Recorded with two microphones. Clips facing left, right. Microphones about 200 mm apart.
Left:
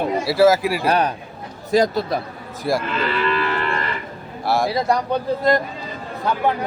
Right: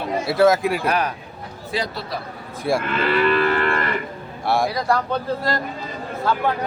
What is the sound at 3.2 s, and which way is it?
Livestock, 55° right (ahead or behind).